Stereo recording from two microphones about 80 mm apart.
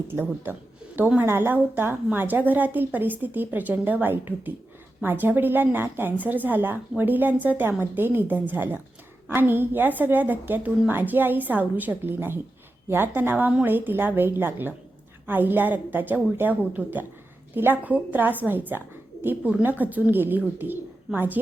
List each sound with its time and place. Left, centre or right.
0.1 s speech: right